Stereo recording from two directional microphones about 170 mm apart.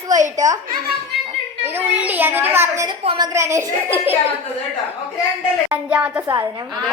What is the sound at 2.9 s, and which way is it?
Speech, 30° right (ahead or behind).